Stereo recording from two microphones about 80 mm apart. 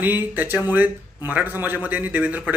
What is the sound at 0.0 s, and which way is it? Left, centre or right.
Speech, right.